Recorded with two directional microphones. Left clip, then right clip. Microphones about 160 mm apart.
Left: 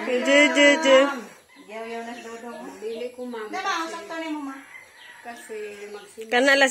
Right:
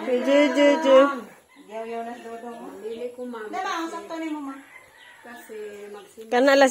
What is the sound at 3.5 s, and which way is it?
Speech, 5° right (ahead or behind).